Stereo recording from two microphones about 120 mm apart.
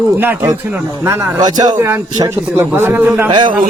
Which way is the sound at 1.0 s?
30° right (ahead or behind).